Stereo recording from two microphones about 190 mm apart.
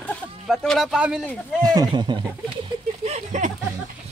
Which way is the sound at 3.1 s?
35° right (ahead or behind).